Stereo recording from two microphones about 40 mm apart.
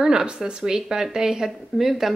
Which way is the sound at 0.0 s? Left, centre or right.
Centre.